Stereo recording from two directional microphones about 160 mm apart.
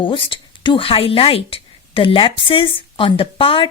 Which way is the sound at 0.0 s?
30° left (ahead or behind).